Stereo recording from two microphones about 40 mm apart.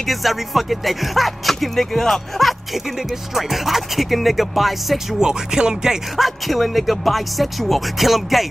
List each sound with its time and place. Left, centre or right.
0.0 s speech: centre
3.0 s speech: centre
5.2 s music: centre
6.1 s speech: centre